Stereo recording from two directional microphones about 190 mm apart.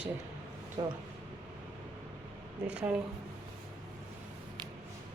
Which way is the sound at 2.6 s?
5° right (ahead or behind).